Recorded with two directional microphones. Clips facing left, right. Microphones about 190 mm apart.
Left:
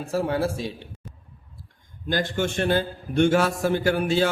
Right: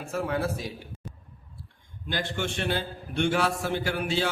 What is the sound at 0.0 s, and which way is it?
Speech, 35° left (ahead or behind).